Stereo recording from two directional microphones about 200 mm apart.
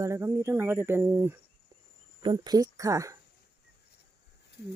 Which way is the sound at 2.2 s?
20° right (ahead or behind).